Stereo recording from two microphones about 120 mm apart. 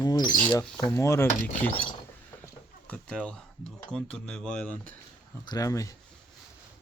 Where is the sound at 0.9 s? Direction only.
20° left (ahead or behind).